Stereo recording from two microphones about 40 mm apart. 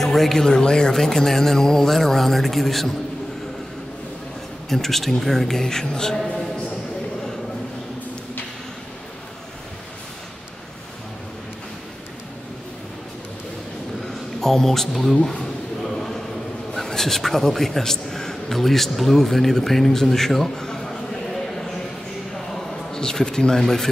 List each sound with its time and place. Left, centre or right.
0.0 s speech: centre
0.5 s speech: centre
4.6 s speech: centre
14.4 s speech: centre
16.7 s a man's voice: centre
22.5 s a sound: centre
23.5 s speech: centre